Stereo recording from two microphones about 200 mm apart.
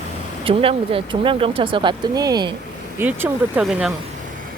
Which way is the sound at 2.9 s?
10° right (ahead or behind).